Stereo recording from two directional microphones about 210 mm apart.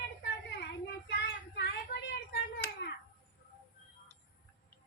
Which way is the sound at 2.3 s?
50° left (ahead or behind).